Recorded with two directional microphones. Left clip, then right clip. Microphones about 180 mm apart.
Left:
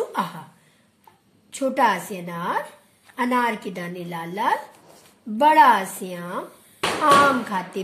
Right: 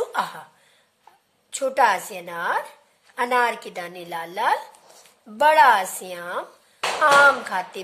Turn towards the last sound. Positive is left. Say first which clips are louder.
# right 3 dB
turn(degrees=-50)  # may be behind; listen again after turning